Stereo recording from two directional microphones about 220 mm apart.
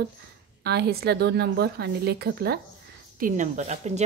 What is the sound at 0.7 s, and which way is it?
A woman's voice, 50° right (ahead or behind).